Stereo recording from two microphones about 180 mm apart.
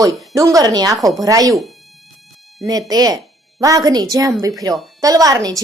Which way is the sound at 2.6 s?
20° right (ahead or behind).